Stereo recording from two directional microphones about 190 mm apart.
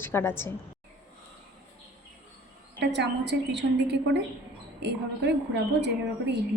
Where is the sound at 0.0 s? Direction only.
10° left (ahead or behind).